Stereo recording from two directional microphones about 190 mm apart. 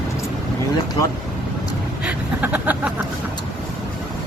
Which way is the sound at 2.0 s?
5° right (ahead or behind).